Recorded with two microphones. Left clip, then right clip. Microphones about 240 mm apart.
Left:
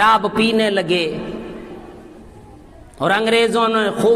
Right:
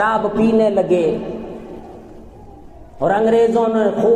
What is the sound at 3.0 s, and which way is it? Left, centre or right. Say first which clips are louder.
Speech: right 1 dB; left.